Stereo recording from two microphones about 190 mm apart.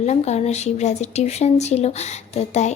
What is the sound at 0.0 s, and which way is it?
A woman's voice, 35° left (ahead or behind).